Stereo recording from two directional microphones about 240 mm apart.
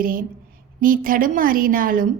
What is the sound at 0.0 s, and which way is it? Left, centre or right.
A woman's voice, right.